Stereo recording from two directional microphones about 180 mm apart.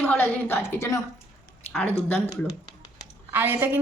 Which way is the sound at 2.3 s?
20° left (ahead or behind).